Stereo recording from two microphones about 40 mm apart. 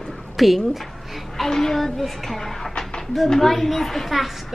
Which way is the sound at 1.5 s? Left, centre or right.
Centre.